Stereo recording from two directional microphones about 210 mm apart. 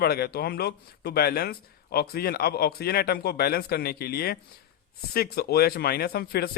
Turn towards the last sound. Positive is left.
turn(degrees=50)  # may be behind; listen again after turning